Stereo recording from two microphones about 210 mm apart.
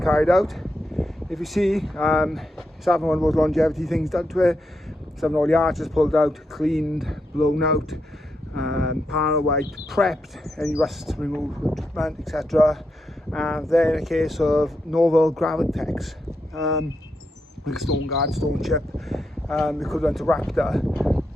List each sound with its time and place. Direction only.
0.0 s speech: centre (ahead or behind)